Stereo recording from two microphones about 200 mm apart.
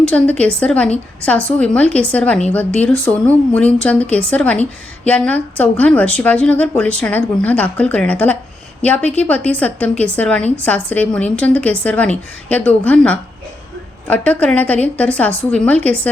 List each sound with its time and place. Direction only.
0.1 s a woman's voice: 5° left (ahead or behind)